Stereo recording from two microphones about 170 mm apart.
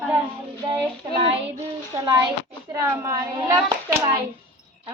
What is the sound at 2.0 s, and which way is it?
A child's voice, 20° right (ahead or behind).